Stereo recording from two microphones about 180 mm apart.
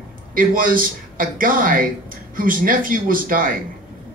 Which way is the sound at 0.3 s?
50° right (ahead or behind).